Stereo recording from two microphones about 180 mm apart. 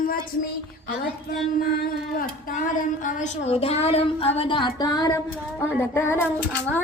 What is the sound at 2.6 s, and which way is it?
Speech, 45° left (ahead or behind).